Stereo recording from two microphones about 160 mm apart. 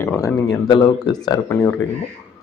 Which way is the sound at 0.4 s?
25° left (ahead or behind).